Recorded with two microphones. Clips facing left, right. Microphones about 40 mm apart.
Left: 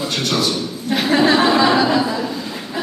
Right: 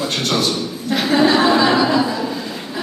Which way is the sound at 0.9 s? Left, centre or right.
Centre.